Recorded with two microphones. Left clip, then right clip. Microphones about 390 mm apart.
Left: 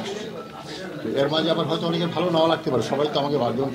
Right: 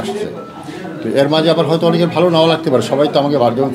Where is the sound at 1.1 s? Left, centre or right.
Right.